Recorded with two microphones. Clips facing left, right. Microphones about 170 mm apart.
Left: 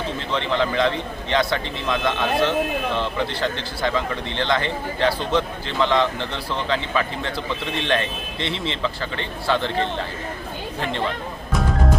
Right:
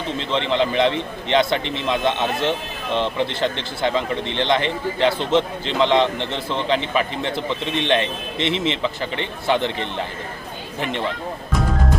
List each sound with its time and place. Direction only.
0.2 s a man's voice: 20° right (ahead or behind)
10.8 s speech: 15° right (ahead or behind)